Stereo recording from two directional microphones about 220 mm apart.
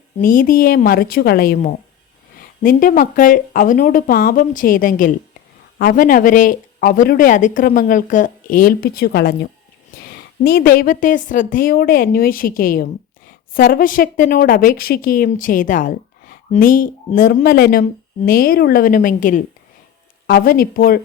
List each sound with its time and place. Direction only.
0.2 s speech: 40° left (ahead or behind)